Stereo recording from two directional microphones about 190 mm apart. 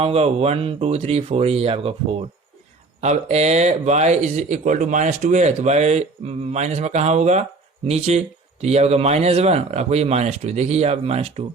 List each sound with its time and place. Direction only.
0.0 s speech: 30° right (ahead or behind)